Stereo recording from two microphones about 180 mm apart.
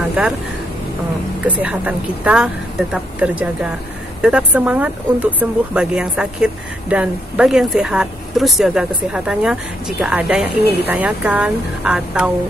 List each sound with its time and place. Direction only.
1.5 s a woman's voice: 10° right (ahead or behind)
10.6 s speech: 65° left (ahead or behind)
10.9 s a woman's voice: 10° right (ahead or behind)